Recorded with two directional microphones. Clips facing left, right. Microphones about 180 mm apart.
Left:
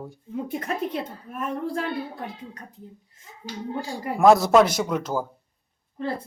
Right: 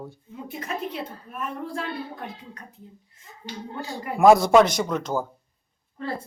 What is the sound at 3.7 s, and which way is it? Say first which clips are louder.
Speech: left 1 dB; 10° left (ahead or behind).